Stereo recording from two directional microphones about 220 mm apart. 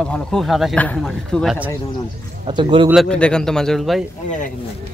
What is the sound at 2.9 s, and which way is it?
Speech, centre (ahead or behind).